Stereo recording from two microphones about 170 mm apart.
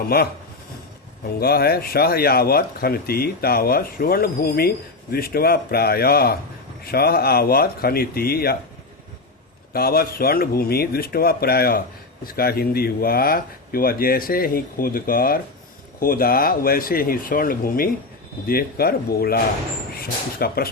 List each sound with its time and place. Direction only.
0.0 s speech: 65° left (ahead or behind)
1.4 s speech: 65° left (ahead or behind)
9.7 s speech: 60° left (ahead or behind)